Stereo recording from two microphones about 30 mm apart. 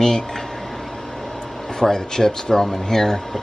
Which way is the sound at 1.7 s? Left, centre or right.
Centre.